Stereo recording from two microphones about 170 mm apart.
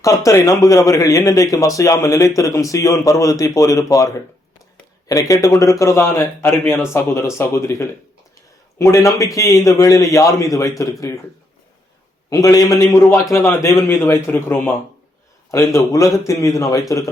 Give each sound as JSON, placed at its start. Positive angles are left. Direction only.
{"t": 0.0, "sound": "a man's voice", "side_deg": 20}
{"t": 5.3, "sound": "a man's voice", "side_deg": 20}
{"t": 12.3, "sound": "a man's voice", "side_deg": 20}